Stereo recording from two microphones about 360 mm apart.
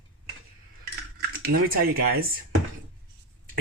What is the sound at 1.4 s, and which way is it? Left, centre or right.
Speech, right.